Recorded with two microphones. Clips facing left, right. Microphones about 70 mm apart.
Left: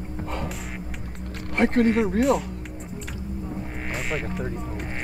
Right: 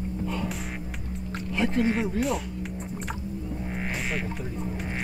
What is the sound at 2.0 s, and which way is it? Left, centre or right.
Speech, centre.